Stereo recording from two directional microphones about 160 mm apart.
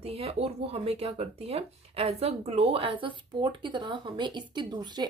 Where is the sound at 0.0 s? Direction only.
35° right (ahead or behind).